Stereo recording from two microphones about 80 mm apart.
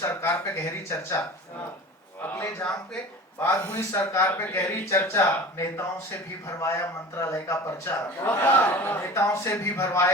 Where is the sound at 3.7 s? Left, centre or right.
Left.